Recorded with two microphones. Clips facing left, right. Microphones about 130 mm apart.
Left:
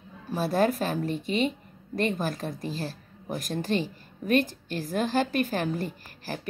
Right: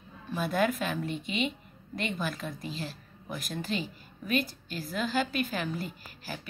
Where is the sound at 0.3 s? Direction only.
35° left (ahead or behind).